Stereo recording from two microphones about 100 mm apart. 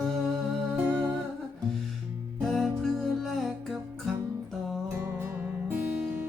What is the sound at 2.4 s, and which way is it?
Music, centre (ahead or behind).